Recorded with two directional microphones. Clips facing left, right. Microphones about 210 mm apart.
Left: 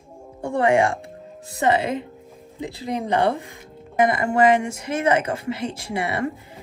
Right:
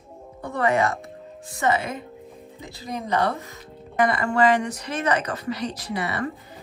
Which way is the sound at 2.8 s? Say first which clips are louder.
Left 3 dB; 30° left (ahead or behind).